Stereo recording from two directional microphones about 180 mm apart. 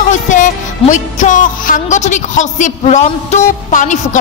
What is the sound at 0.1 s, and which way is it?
Music, 45° left (ahead or behind).